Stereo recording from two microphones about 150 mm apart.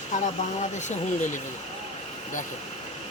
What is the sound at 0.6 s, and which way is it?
Speech, 55° left (ahead or behind).